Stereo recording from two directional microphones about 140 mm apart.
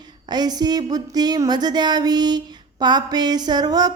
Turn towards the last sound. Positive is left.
turn(degrees=-30)  # may be behind; listen again after turning